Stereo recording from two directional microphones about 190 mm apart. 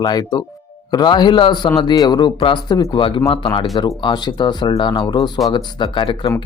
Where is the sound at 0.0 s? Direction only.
20° left (ahead or behind).